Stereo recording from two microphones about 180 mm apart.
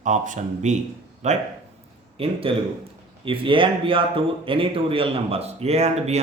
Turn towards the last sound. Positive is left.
turn(degrees=-35)  # may be behind; listen again after turning